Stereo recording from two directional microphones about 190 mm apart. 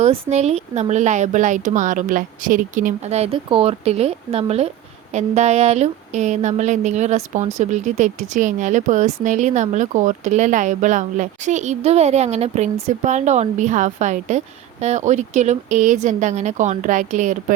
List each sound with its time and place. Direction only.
0.0 s speech: 35° right (ahead or behind)